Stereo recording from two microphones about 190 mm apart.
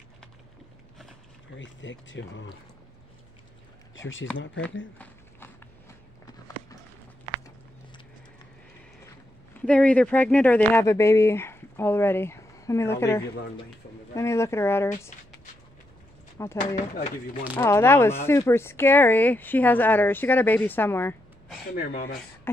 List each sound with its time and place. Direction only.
1.5 s speech: 75° left (ahead or behind)
3.9 s speech: 85° left
4.9 s walk: 10° left (ahead or behind)
9.6 s speech: 5° left (ahead or behind)
16.4 s speech: 15° left (ahead or behind)
17.6 s speech: 15° left (ahead or behind)
21.7 s speech: 50° left (ahead or behind)